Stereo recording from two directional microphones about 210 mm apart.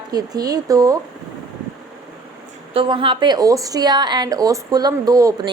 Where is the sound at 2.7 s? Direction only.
25° right (ahead or behind).